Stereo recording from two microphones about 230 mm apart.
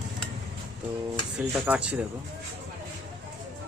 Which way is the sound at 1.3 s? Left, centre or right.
Centre.